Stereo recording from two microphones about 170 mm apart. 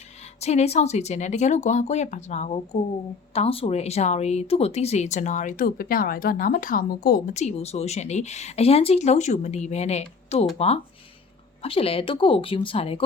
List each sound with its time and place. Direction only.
0.3 s speech: 40° left (ahead or behind); by 7.2 s 60° left (ahead or behind)
7.3 s speech: 40° left (ahead or behind)
11.6 s speech: 35° left (ahead or behind)